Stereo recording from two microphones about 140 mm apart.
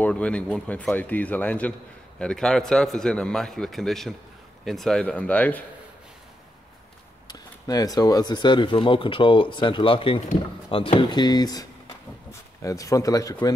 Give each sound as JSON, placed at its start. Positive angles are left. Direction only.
{"t": 0.0, "sound": "a man's voice", "side_deg": 10}
{"t": 7.2, "sound": "speech", "side_deg": 25}